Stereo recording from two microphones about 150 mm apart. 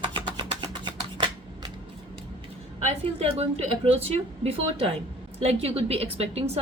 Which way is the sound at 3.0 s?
40° right (ahead or behind).